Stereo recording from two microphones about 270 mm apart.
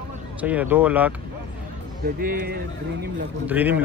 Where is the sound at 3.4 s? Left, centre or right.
Centre.